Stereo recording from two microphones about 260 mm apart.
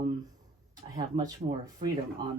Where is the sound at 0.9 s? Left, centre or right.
Centre.